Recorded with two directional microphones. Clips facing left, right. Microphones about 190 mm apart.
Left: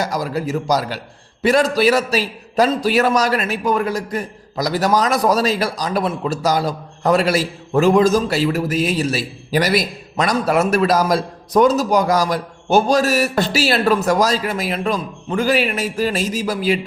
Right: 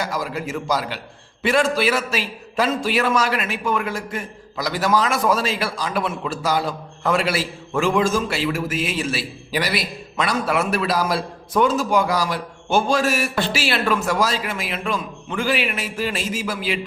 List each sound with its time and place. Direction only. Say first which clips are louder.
0.0 s a man's voice: left 4 dB; 40° left (ahead or behind)